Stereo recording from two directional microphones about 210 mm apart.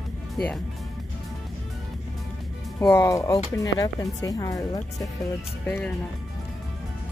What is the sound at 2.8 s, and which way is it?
Speech, 15° left (ahead or behind).